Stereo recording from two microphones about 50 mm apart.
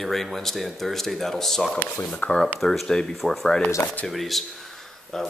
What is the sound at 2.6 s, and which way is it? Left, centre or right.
Speech, centre.